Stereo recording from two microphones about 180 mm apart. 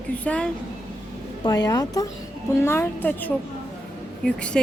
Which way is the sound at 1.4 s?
20° left (ahead or behind).